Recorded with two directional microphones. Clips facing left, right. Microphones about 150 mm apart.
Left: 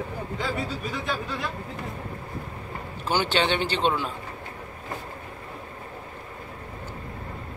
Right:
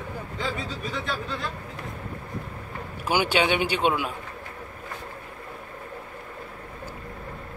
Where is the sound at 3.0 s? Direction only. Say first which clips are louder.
Right 1 dB; 10° right (ahead or behind).